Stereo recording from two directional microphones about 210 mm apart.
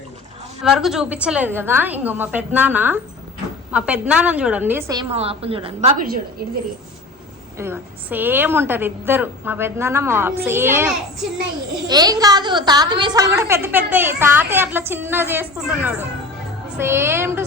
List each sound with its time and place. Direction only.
0.6 s a woman's voice: centre (ahead or behind)
4.9 s a woman's voice: 25° right (ahead or behind)
7.6 s a woman's voice: 10° right (ahead or behind)
11.9 s a woman's voice: 20° right (ahead or behind)